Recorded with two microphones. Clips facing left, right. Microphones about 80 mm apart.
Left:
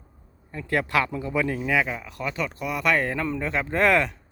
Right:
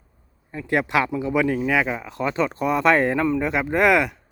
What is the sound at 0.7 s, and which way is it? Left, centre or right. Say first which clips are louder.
Speech: right 3 dB; right.